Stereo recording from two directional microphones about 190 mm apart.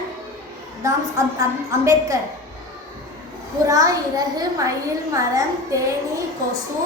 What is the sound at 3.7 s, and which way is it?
A child's voice, 20° right (ahead or behind).